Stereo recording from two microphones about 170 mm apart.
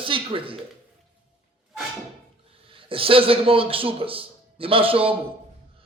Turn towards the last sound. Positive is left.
turn(degrees=-35)  # may be behind; listen again after turning